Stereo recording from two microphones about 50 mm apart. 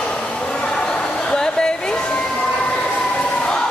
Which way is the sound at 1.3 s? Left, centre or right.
Centre.